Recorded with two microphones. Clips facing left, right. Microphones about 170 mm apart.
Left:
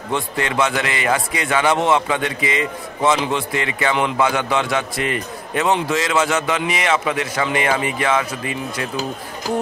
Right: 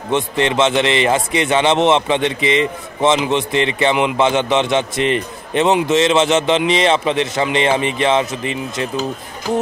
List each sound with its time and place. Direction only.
0.1 s a man's voice: 25° right (ahead or behind)